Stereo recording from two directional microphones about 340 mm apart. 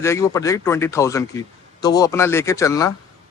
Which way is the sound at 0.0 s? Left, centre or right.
Centre.